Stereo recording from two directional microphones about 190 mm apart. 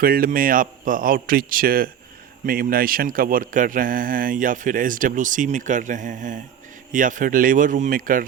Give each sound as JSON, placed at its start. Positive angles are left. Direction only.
{"t": 0.0, "sound": "speech", "side_deg": -50}